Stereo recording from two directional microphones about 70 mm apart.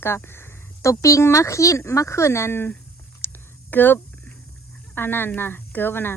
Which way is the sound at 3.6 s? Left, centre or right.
Left.